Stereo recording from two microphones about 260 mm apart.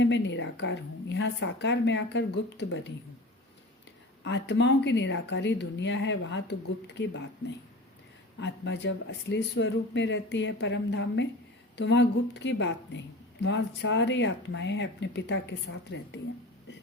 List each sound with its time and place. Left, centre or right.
0.0 s speech: left
4.2 s speech: left